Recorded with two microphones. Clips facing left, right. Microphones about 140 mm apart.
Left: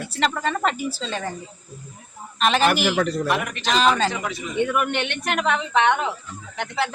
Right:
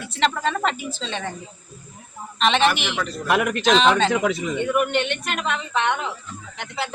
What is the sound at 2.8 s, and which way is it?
Speech, 40° left (ahead or behind).